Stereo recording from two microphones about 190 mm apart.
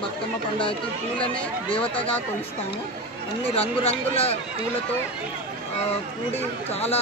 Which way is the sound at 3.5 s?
30° left (ahead or behind).